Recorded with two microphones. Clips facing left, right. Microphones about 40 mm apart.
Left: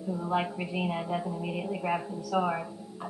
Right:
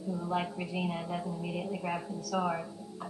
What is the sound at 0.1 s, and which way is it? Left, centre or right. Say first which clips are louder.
A woman's voice: left 4 dB; left.